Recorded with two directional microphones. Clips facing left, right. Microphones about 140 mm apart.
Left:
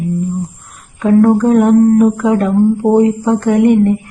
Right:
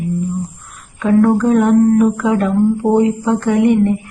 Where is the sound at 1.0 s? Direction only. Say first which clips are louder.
Left 3 dB; 40° left (ahead or behind).